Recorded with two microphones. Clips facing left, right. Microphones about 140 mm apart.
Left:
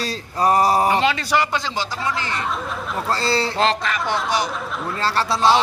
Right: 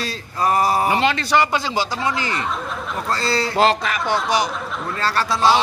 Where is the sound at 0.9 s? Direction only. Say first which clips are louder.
Right 1 dB; centre (ahead or behind).